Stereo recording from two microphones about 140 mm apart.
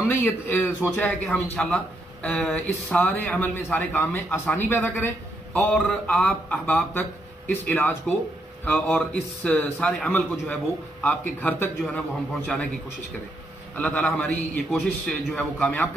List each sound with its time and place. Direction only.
0.1 s a man's voice: 15° left (ahead or behind)
13.7 s a man's voice: 10° left (ahead or behind)